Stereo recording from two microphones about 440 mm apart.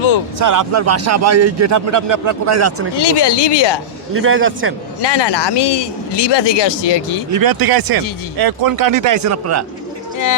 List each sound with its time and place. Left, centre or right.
0.3 s a man's voice: right
2.9 s speech: left
4.1 s a man's voice: right
5.0 s speech: left
7.3 s speech: right